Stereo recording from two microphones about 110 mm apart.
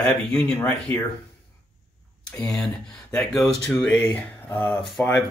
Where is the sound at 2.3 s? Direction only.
5° left (ahead or behind).